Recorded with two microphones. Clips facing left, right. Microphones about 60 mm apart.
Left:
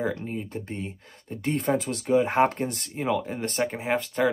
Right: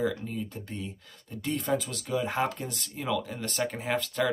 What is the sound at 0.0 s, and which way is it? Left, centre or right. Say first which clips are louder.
Speech: left 1 dB; left.